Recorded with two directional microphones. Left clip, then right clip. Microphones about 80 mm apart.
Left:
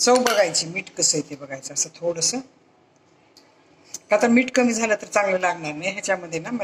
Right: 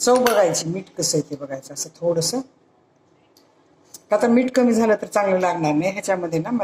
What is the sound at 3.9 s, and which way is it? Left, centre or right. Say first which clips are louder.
A woman's voice: even; right.